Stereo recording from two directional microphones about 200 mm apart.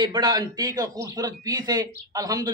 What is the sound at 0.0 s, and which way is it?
A man's voice, 20° right (ahead or behind).